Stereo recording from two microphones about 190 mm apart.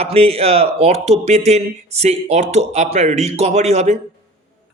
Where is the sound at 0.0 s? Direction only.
30° right (ahead or behind).